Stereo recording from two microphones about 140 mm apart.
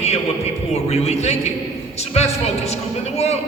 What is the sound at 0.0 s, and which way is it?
A man's voice, 50° left (ahead or behind).